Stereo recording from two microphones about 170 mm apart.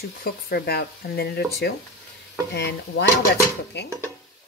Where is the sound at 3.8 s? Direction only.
80° left.